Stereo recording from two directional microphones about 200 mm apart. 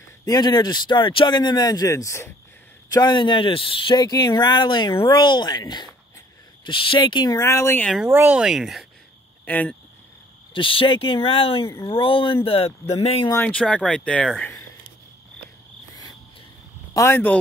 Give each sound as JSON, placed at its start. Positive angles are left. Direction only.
{"t": 0.2, "sound": "speech", "side_deg": 20}
{"t": 7.9, "sound": "speech", "side_deg": -10}
{"t": 10.5, "sound": "speech", "side_deg": 25}
{"t": 13.3, "sound": "speech", "side_deg": 10}
{"t": 16.9, "sound": "speech", "side_deg": 10}